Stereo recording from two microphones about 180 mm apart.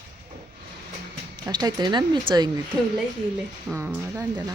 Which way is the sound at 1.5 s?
25° right (ahead or behind).